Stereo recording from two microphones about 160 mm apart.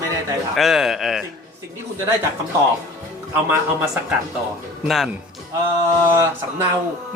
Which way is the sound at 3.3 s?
10° right (ahead or behind).